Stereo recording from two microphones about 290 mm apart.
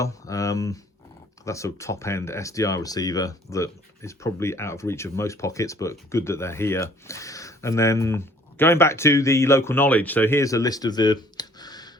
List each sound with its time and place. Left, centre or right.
0.0 s speech: centre